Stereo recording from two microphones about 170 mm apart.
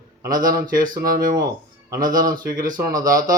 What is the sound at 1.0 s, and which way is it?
Speech, 55° right (ahead or behind).